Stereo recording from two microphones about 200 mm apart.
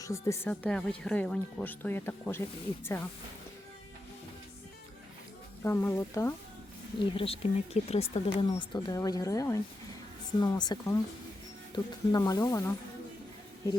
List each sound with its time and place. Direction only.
0.0 s speech: 15° left (ahead or behind)
5.6 s speech: 10° left (ahead or behind)
7.0 s speech: 25° left (ahead or behind)